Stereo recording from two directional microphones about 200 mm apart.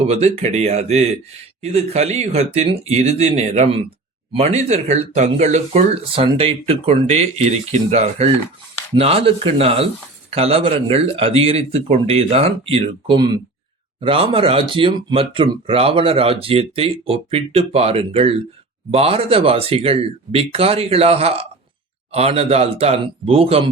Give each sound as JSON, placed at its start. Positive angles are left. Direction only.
{"t": 0.0, "sound": "speech", "side_deg": -30}